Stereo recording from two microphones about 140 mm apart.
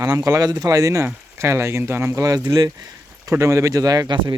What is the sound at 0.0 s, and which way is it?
Speech, 25° right (ahead or behind).